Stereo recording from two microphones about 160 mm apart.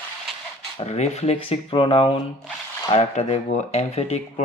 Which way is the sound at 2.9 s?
40° left (ahead or behind).